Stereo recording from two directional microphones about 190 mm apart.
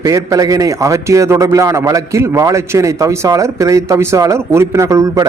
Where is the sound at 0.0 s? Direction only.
15° right (ahead or behind).